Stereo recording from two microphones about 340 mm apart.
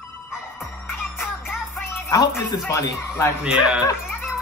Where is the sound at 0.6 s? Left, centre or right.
Centre.